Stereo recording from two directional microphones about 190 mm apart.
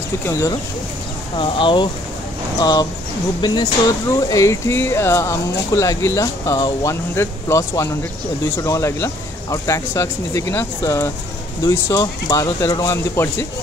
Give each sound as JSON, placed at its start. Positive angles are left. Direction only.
{"t": 0.2, "sound": "speech", "side_deg": 15}
{"t": 1.3, "sound": "speech", "side_deg": 25}